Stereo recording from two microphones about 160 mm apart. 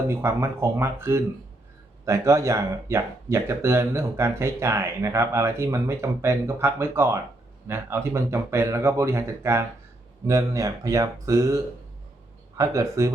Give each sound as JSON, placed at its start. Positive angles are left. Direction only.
{"t": 0.1, "sound": "speech", "side_deg": -15}